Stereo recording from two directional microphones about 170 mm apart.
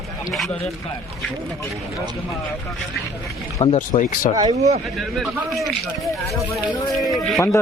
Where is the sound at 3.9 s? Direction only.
50° left (ahead or behind).